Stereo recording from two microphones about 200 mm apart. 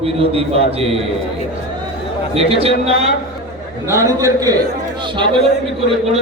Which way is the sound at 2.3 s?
30° right (ahead or behind).